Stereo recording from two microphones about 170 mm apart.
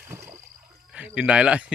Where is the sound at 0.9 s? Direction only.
10° right (ahead or behind).